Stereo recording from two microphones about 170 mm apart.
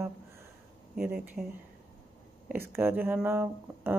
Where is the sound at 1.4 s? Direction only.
15° right (ahead or behind).